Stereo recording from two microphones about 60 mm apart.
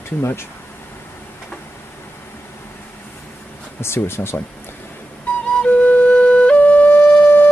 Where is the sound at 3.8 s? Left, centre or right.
Left.